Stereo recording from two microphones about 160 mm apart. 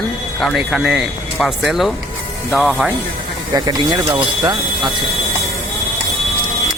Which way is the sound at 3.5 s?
25° right (ahead or behind).